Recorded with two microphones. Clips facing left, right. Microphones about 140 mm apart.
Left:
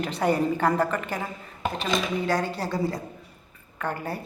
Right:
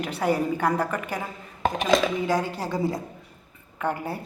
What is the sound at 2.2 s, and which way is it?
Speech, 5° right (ahead or behind).